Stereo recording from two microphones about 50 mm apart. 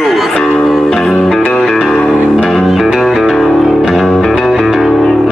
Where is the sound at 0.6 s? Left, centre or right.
Centre.